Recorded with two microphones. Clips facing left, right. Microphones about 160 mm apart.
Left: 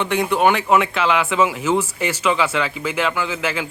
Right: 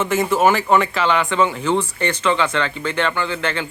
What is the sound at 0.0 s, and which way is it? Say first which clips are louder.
Speech: right 1 dB; centre (ahead or behind).